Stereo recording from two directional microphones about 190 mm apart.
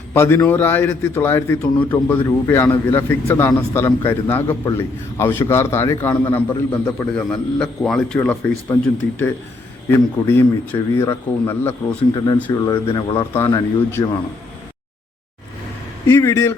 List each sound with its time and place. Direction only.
0.1 s a man's voice: 10° left (ahead or behind)
16.0 s a man's voice: 15° left (ahead or behind)